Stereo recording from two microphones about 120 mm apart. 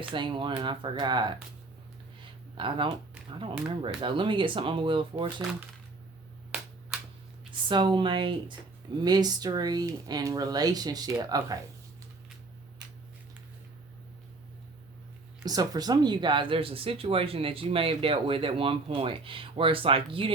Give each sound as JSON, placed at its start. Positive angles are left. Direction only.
{"t": 0.0, "sound": "speech", "side_deg": -45}
{"t": 2.6, "sound": "speech", "side_deg": -45}
{"t": 7.7, "sound": "speech", "side_deg": -40}
{"t": 15.4, "sound": "speech", "side_deg": -30}